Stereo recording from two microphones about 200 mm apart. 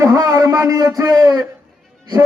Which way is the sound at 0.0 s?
15° right (ahead or behind).